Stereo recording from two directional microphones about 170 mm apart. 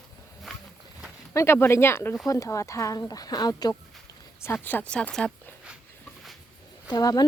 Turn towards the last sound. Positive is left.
turn(degrees=20)  # may be behind; listen again after turning